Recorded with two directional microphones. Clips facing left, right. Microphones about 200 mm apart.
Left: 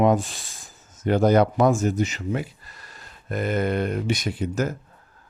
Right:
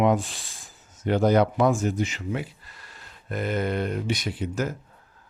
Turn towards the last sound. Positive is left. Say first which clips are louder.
# left 3 dB
turn(degrees=45)  # may be behind; listen again after turning